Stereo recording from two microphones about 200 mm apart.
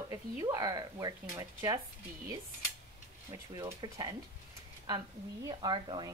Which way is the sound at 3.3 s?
20° right (ahead or behind).